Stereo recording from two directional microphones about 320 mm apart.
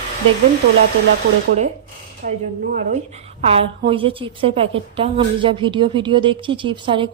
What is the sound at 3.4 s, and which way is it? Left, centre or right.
A woman's voice, centre.